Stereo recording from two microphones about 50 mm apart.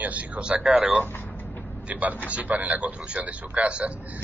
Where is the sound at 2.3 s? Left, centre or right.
Right.